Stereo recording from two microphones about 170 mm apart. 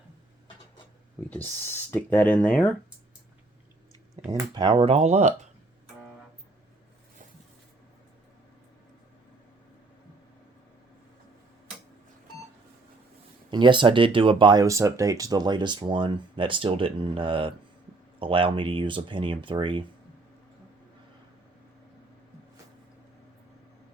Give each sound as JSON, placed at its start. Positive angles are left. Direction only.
{"t": 1.3, "sound": "speech", "side_deg": 10}
{"t": 4.3, "sound": "speech", "side_deg": -25}
{"t": 13.5, "sound": "speech", "side_deg": -30}